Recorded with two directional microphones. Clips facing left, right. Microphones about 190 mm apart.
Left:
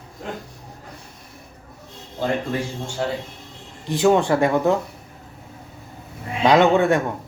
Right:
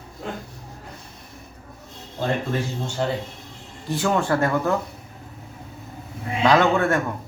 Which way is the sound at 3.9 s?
20° left (ahead or behind).